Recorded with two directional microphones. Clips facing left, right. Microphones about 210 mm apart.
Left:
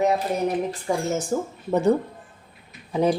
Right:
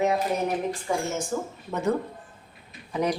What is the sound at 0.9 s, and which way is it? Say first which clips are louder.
Speech: left 5 dB; 35° left (ahead or behind).